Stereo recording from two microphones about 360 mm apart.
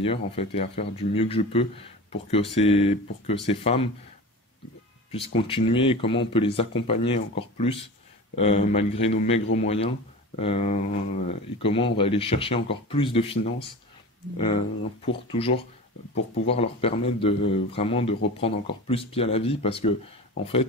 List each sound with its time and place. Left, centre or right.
0.0 s speech: centre
5.1 s speech: centre
15.2 s speech: centre